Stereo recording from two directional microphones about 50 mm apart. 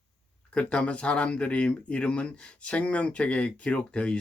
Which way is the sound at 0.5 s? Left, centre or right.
Left.